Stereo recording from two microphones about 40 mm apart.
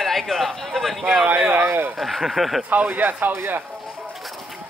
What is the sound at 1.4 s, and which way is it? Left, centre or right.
Speech, right.